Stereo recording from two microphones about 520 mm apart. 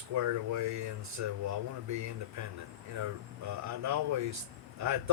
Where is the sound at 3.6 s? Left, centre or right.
Right.